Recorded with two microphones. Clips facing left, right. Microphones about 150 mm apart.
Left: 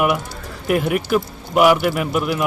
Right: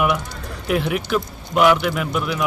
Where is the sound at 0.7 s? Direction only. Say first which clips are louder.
Left 2 dB; 50° left (ahead or behind).